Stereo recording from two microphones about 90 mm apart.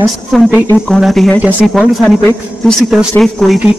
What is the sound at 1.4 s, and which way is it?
Speech, 20° right (ahead or behind).